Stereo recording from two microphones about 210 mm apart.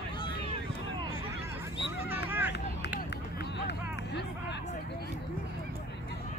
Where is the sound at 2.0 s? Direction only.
10° right (ahead or behind).